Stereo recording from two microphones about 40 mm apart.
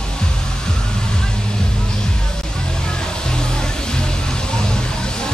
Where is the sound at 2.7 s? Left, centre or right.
Centre.